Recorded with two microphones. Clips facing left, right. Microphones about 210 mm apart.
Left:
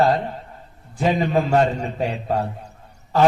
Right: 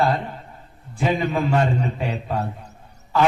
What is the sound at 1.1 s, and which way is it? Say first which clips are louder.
A man's voice: left 2 dB; 40° left (ahead or behind).